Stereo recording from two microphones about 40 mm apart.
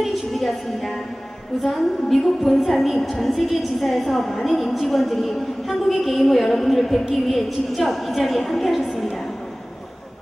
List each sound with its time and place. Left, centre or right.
0.0 s a woman's voice: centre